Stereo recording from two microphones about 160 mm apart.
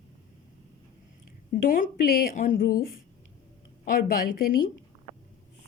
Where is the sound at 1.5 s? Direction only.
60° left (ahead or behind).